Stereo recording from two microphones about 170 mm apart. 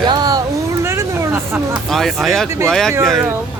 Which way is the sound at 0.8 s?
15° right (ahead or behind).